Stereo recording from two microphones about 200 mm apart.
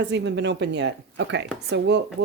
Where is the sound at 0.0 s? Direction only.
60° right (ahead or behind).